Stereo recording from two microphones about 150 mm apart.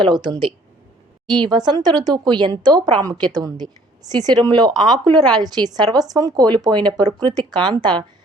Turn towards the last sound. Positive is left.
turn(degrees=-30)  # may be behind; listen again after turning